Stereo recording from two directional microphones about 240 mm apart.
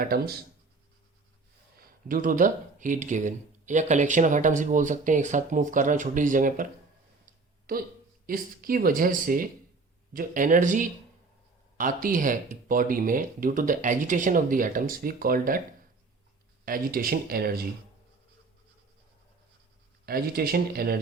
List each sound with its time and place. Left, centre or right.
0.0 s speech: right
1.8 s speech: right
7.7 s speech: right
16.6 s speech: right
20.1 s speech: right